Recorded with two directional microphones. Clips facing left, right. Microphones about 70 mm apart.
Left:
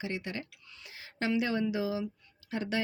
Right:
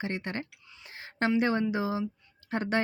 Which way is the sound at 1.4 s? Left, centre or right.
Right.